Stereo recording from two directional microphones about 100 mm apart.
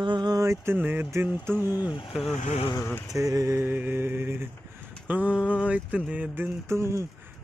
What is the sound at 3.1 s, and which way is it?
Mantra, 35° right (ahead or behind).